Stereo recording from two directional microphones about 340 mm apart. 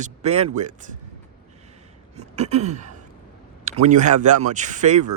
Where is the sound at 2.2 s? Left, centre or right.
Centre.